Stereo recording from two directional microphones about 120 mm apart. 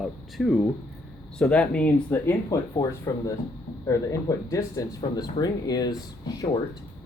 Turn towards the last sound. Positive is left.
turn(degrees=35)  # may be behind; listen again after turning